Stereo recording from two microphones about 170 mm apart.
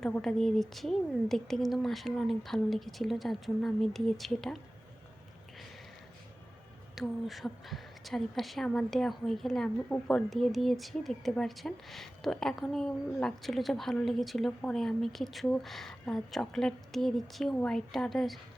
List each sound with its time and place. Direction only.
0.0 s a woman's voice: 5° left (ahead or behind)
6.9 s a woman's voice: centre (ahead or behind)